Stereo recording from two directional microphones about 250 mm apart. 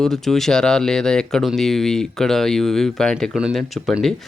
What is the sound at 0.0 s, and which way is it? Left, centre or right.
Speech, centre.